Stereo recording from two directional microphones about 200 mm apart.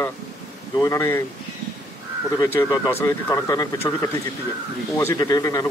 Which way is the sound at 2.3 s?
15° left (ahead or behind).